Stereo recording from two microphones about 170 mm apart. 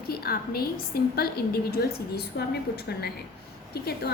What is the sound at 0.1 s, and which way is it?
A woman's voice, 65° left (ahead or behind).